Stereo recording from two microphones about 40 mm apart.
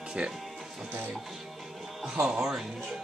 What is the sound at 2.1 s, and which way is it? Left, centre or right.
Speech, right.